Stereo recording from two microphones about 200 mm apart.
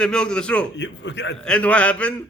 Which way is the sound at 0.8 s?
65° left (ahead or behind).